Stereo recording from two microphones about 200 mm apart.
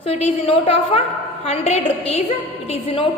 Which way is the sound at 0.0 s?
30° left (ahead or behind).